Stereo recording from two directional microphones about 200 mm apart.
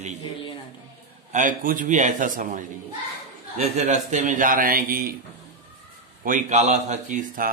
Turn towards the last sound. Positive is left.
turn(degrees=-40)  # may be behind; listen again after turning